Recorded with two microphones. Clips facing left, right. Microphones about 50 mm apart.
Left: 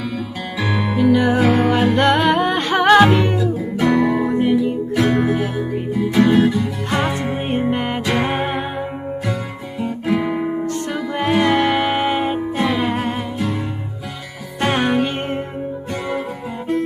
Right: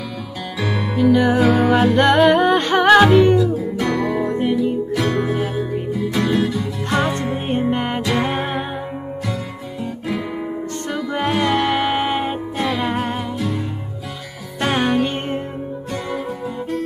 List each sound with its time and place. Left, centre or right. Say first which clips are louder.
0.6 s music: left 2 dB; centre
0.9 s music: right 1 dB; centre
5.9 s music: left 5 dB; centre
10.2 s guitar: left 5 dB; left
11.1 s music: left 3 dB; centre
14.7 s music: even; centre